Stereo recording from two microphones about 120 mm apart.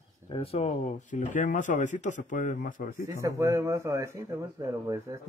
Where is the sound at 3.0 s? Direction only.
25° right (ahead or behind).